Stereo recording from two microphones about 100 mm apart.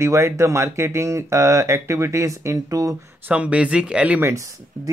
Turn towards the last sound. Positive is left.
turn(degrees=-15)  # may be behind; listen again after turning